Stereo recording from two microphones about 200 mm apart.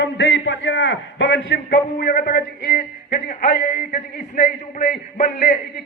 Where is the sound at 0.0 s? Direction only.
65° left (ahead or behind).